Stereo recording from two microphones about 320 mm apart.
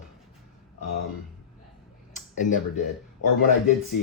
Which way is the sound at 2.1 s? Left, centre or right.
Left.